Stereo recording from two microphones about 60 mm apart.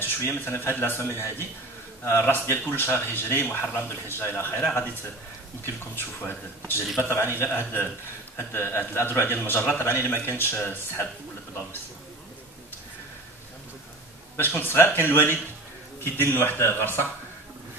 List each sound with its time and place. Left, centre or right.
0.0 s a man's voice: left
5.9 s a man's voice: left
14.3 s speech: left